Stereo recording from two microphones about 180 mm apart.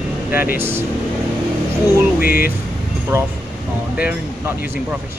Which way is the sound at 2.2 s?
55° left (ahead or behind).